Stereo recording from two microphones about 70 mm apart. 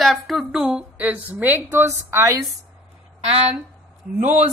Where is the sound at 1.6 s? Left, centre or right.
Right.